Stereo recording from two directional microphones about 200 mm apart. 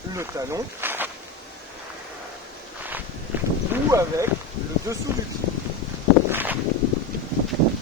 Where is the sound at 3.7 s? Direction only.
15° right (ahead or behind).